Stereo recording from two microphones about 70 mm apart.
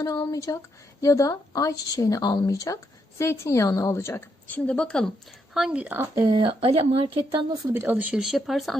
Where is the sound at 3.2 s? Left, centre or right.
Left.